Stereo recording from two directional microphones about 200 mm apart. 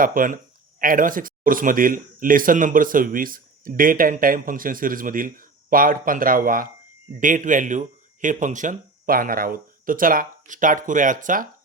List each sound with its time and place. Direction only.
0.0 s speech: 45° right (ahead or behind)